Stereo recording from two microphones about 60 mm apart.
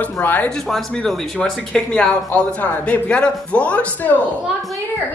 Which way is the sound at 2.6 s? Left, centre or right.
Left.